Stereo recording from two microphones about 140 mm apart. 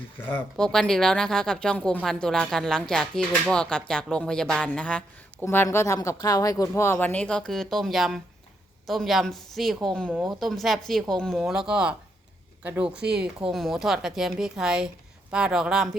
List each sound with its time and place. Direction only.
0.2 s speech: 15° left (ahead or behind)
0.5 s a woman's voice: 5° left (ahead or behind)